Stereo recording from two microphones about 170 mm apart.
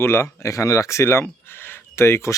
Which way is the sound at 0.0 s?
15° left (ahead or behind).